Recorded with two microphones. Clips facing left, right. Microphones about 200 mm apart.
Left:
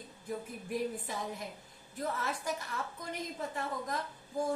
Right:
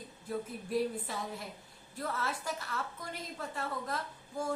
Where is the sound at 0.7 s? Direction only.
15° left (ahead or behind).